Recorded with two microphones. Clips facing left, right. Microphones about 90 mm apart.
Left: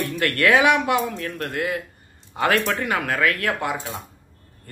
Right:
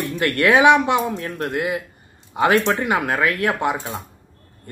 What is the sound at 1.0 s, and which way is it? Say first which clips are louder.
Speech: right 2 dB; 35° right (ahead or behind).